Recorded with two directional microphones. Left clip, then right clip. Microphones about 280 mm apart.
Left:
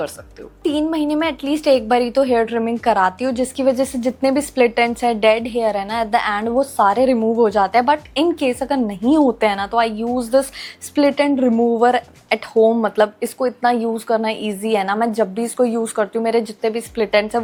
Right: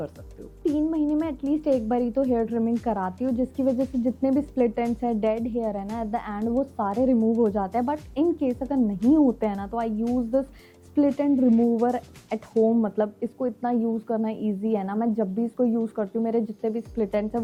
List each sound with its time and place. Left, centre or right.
0.8 s a woman's voice: centre
7.2 s speech: left
7.4 s a woman's voice: centre
10.0 s speech: left
10.9 s a woman's voice: centre